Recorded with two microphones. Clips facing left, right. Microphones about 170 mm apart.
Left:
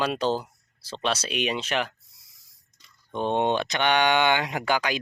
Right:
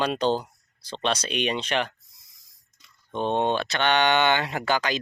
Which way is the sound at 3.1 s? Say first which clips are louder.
Even; 15° left (ahead or behind).